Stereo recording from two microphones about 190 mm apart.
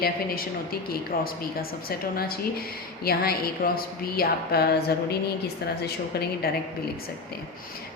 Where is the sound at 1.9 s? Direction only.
50° left (ahead or behind).